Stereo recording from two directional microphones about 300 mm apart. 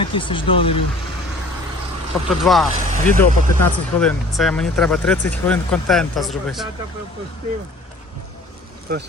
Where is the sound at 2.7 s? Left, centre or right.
Right.